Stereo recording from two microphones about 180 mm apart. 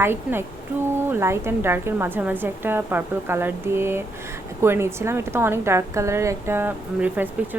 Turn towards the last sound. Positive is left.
turn(degrees=-10)  # may be behind; listen again after turning